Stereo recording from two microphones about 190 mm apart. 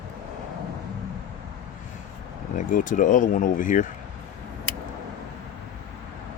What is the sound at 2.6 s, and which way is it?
Speech, 45° left (ahead or behind).